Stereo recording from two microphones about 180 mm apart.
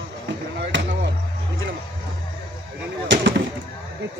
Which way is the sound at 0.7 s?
90° right.